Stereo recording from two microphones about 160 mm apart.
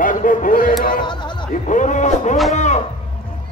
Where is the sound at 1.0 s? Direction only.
30° left (ahead or behind).